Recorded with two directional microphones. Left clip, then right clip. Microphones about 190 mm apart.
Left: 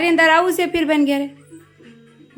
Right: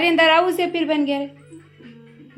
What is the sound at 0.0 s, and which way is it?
A woman's voice, 10° left (ahead or behind).